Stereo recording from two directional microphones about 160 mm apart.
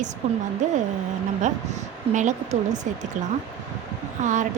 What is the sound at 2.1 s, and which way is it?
Speech, 50° right (ahead or behind).